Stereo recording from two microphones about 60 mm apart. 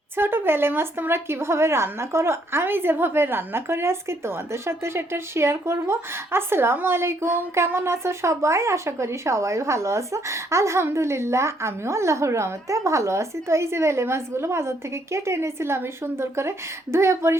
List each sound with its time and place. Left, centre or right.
0.2 s speech: right